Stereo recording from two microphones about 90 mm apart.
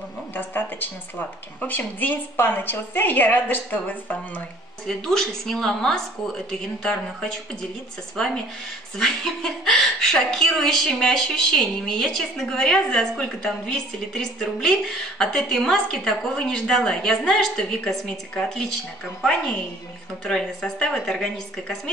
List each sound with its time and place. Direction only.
0.3 s a woman's voice: 20° left (ahead or behind)
4.8 s a woman's voice: 5° left (ahead or behind)
8.9 s a woman's voice: 5° left (ahead or behind)